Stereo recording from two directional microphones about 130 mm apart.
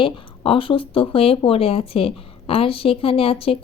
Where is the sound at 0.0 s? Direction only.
45° left (ahead or behind).